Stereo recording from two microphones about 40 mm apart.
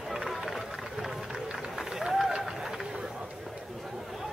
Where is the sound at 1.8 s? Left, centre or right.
Centre.